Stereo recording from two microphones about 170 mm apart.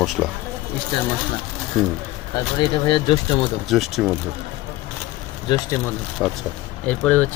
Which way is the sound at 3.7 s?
Centre (ahead or behind).